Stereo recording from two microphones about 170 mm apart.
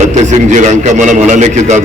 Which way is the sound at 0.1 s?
45° right (ahead or behind).